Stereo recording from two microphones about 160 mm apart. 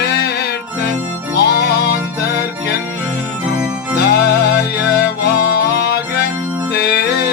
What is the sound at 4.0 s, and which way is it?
Music, 90° left.